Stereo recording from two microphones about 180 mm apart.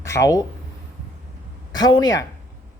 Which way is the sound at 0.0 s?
15° left (ahead or behind).